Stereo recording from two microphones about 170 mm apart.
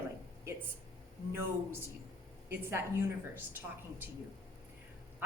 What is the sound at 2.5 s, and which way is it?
A woman's voice, 15° right (ahead or behind).